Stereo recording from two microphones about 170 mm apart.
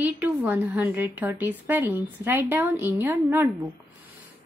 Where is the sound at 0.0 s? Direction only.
10° right (ahead or behind).